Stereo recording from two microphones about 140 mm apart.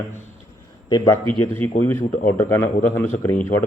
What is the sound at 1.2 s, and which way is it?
Speech, 35° right (ahead or behind).